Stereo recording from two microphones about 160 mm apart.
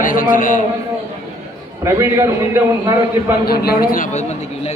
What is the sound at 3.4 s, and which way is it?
Speech, 75° left (ahead or behind).